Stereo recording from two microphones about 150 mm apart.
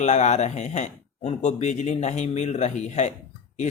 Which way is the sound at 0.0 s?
50° left (ahead or behind).